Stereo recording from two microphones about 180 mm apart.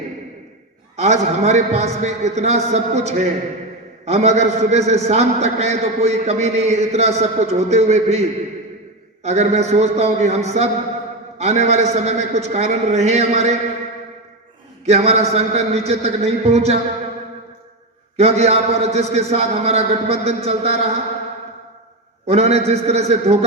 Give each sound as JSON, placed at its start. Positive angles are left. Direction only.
{"t": 0.9, "sound": "a man's voice", "side_deg": -40}
{"t": 14.8, "sound": "a man's voice", "side_deg": -35}
{"t": 18.2, "sound": "a man's voice", "side_deg": -35}
{"t": 22.3, "sound": "a man's voice", "side_deg": -35}